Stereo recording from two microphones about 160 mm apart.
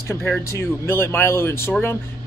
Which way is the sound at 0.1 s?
15° left (ahead or behind).